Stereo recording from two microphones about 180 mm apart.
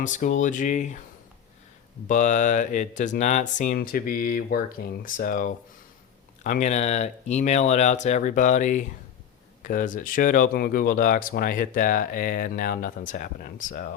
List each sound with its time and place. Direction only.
0.0 s speech: 45° left (ahead or behind)
2.0 s speech: 45° left (ahead or behind)